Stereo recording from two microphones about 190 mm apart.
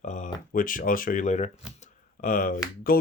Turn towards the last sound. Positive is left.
turn(degrees=50)  # may be behind; listen again after turning